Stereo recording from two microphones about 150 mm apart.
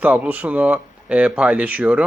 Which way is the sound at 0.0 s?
10° right (ahead or behind).